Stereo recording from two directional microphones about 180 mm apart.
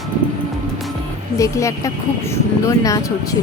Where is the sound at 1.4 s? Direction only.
15° left (ahead or behind).